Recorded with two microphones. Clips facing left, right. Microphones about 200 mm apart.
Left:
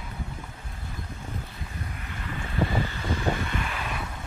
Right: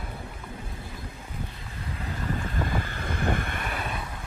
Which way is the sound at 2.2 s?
45° right (ahead or behind).